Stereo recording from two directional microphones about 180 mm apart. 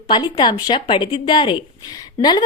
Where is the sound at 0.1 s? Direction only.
25° left (ahead or behind).